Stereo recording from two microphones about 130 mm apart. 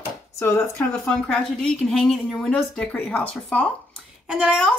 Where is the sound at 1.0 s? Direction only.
5° left (ahead or behind).